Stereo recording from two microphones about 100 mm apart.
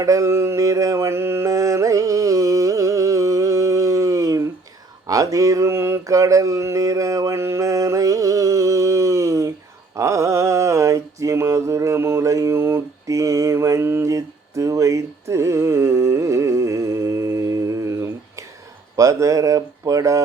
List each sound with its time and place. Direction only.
0.0 s mantra: 30° right (ahead or behind)
18.9 s speech: 35° right (ahead or behind)